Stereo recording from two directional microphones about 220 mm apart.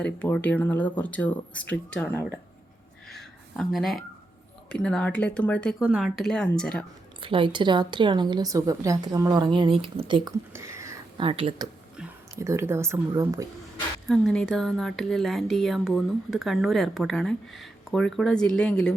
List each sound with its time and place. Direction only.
0.0 s speech: 5° left (ahead or behind)
3.1 s a sound: centre (ahead or behind)
4.7 s speech: 5° left (ahead or behind)
7.2 s speech: 25° right (ahead or behind)
10.2 s speech: 10° right (ahead or behind)
14.1 s speech: centre (ahead or behind)